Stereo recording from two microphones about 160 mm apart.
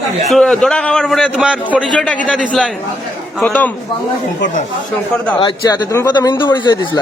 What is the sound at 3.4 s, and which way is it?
Speech, 10° left (ahead or behind).